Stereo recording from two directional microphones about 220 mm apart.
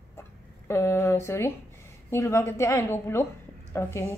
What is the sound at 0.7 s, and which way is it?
A woman's voice, 10° left (ahead or behind).